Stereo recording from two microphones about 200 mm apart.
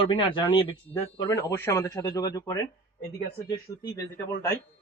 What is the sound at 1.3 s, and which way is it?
Speech, 15° left (ahead or behind).